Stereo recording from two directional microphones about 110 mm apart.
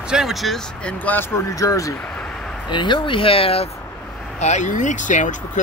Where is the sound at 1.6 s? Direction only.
30° left (ahead or behind).